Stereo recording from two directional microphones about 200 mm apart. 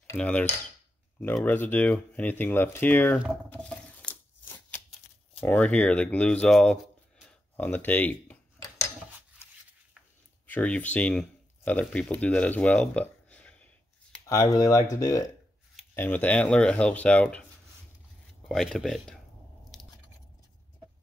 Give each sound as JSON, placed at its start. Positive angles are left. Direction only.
{"t": 0.0, "sound": "cutlery", "side_deg": 10}
{"t": 1.2, "sound": "speech", "side_deg": 10}
{"t": 3.6, "sound": "a sound", "side_deg": 5}
{"t": 5.4, "sound": "speech", "side_deg": 5}
{"t": 10.4, "sound": "speech", "side_deg": 5}
{"t": 18.5, "sound": "speech", "side_deg": 0}
{"t": 19.7, "sound": "a sound", "side_deg": 0}